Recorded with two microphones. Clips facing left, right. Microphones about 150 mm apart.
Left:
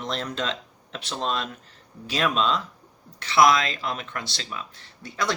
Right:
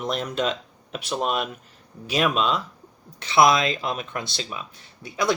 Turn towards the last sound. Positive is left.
turn(degrees=-10)  # may be behind; listen again after turning